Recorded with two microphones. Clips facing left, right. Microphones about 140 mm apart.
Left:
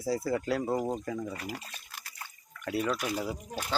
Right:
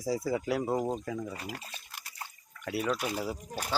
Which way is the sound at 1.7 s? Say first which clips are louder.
Even; 15° right (ahead or behind).